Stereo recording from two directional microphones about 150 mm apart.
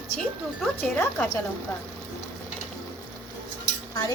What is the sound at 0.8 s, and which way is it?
Speech, 10° left (ahead or behind).